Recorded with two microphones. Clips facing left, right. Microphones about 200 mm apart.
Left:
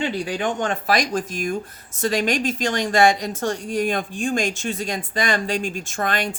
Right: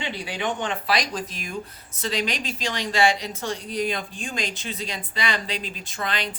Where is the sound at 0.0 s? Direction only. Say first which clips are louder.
Left 5 dB; 45° left (ahead or behind).